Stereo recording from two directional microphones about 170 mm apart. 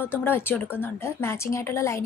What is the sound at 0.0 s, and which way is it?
A woman's voice, 10° left (ahead or behind).